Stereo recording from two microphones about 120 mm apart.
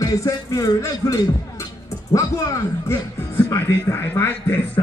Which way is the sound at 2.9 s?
20° left (ahead or behind).